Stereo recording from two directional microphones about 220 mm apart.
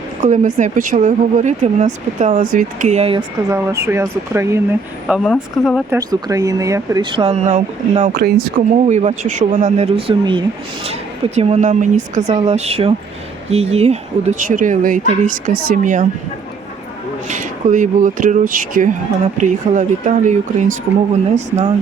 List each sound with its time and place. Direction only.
0.2 s speech: 35° right (ahead or behind)
3.5 s speech: 10° right (ahead or behind)
5.0 s speech: centre (ahead or behind)
5.9 s speech: 15° right (ahead or behind); by 16.0 s 35° right (ahead or behind)
17.2 s speech: 35° right (ahead or behind)